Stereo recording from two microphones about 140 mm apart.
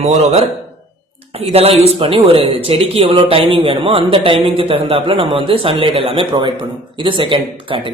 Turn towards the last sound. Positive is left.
turn(degrees=-40)  # may be behind; listen again after turning